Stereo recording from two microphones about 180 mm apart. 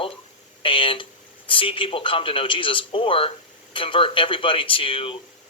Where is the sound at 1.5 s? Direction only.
30° left (ahead or behind).